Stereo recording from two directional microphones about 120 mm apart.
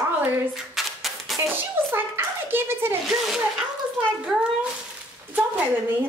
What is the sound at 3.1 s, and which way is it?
Speech, centre (ahead or behind).